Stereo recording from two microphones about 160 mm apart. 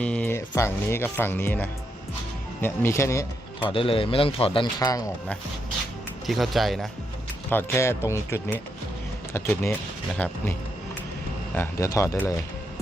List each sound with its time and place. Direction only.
0.0 s speech: 10° left (ahead or behind)
0.3 s speech: 20° left (ahead or behind)
3.6 s speech: 35° left (ahead or behind)
6.2 s speech: centre (ahead or behind)
7.5 s speech: 15° left (ahead or behind)
11.5 s speech: 15° left (ahead or behind)